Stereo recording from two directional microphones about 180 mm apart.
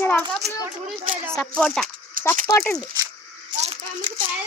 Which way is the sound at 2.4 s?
15° left (ahead or behind).